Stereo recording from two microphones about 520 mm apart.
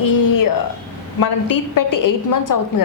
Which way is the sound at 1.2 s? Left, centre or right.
Left.